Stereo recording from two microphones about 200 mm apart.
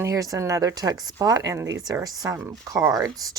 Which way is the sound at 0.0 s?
15° right (ahead or behind).